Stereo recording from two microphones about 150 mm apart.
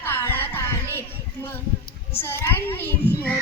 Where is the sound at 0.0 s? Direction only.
15° left (ahead or behind).